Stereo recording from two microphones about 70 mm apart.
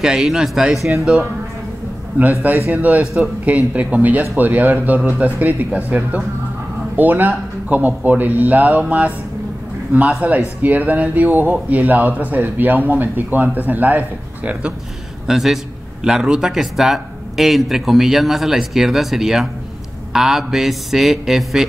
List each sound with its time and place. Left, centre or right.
0.0 s a man's voice: centre
2.1 s a man's voice: right
15.2 s a man's voice: centre